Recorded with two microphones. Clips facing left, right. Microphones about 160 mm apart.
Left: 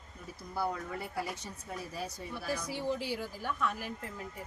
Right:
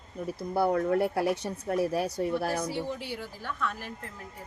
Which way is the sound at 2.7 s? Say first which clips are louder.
Right 1 dB; 10° left (ahead or behind).